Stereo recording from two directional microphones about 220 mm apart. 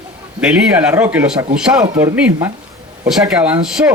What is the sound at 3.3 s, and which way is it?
Speech, 5° right (ahead or behind).